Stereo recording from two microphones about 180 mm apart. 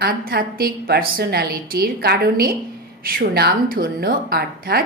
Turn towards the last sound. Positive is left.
turn(degrees=-60)  # may be behind; listen again after turning